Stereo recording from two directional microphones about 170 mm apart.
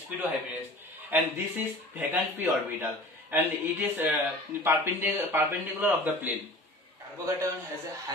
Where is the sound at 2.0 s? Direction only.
10° right (ahead or behind).